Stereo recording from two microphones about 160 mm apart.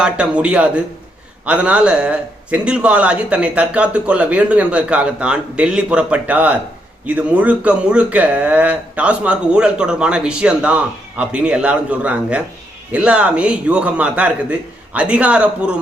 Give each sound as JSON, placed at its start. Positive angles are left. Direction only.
{"t": 0.0, "sound": "speech", "side_deg": -5}